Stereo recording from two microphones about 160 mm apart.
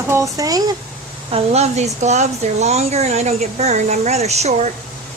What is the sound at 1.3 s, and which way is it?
Speech, 40° right (ahead or behind).